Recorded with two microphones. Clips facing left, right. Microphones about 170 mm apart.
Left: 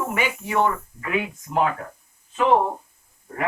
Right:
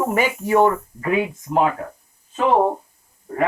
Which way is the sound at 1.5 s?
25° right (ahead or behind).